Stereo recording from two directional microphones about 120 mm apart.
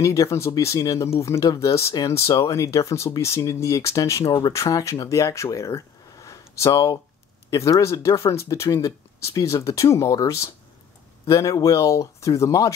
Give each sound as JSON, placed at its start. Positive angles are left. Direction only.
{"t": 0.0, "sound": "speech", "side_deg": 25}